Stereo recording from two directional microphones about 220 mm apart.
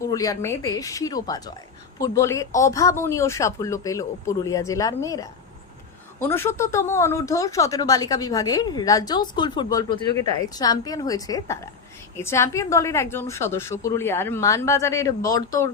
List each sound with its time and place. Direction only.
0.0 s speech: 15° left (ahead or behind)